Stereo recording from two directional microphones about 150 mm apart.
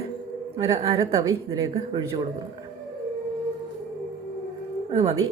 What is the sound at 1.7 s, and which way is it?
Speech, 35° right (ahead or behind).